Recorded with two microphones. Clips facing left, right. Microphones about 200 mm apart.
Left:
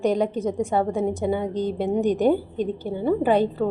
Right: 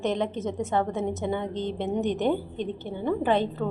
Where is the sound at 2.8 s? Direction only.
10° left (ahead or behind).